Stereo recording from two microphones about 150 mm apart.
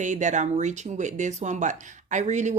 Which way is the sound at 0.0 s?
55° right (ahead or behind).